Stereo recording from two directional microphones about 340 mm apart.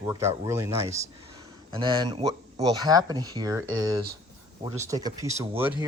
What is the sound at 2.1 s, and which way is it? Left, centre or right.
Speech, centre.